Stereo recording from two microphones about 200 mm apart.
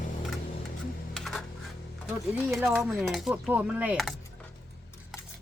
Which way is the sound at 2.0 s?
5° right (ahead or behind).